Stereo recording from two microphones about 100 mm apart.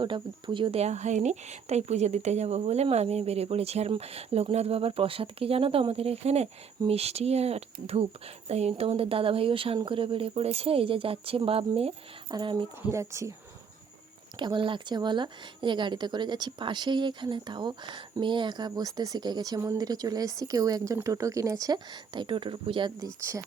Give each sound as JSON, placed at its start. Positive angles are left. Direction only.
{"t": 0.0, "sound": "speech", "side_deg": -55}
{"t": 1.6, "sound": "speech", "side_deg": -90}
{"t": 12.3, "sound": "a woman's voice", "side_deg": -55}
{"t": 12.9, "sound": "speech", "side_deg": -30}
{"t": 14.3, "sound": "a woman's voice", "side_deg": -50}
{"t": 22.1, "sound": "speech", "side_deg": -55}